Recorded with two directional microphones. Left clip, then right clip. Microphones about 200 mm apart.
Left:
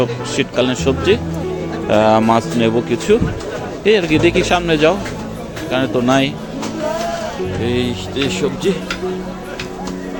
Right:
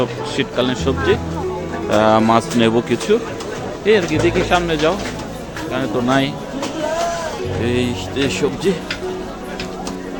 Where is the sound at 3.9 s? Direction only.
15° left (ahead or behind).